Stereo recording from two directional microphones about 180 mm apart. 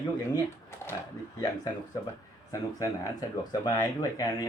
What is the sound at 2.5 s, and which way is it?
Speech, 20° left (ahead or behind).